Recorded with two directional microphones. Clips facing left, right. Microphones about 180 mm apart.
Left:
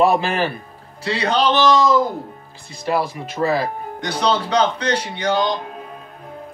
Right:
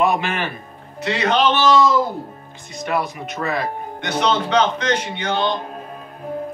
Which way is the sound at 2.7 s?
30° left (ahead or behind).